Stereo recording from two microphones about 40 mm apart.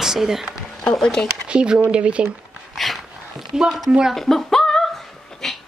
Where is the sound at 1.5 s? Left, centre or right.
Right.